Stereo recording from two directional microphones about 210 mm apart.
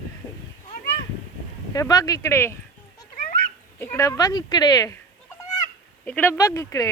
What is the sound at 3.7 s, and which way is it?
Speech, 10° left (ahead or behind).